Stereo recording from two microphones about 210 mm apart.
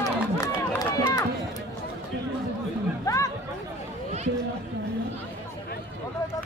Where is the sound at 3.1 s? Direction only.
15° left (ahead or behind).